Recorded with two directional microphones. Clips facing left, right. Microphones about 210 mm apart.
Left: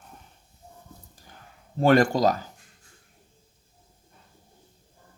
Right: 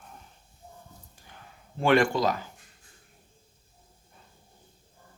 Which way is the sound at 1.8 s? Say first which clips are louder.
Left 3 dB; 40° left (ahead or behind).